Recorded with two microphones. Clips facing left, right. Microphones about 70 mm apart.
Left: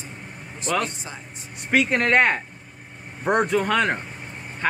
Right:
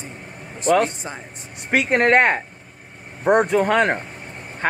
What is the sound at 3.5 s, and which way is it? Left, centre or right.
Speech, right.